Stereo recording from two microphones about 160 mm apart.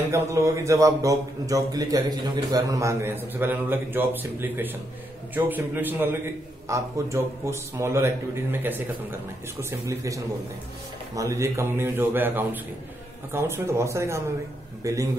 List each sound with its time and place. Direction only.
0.1 s a man's voice: 20° right (ahead or behind)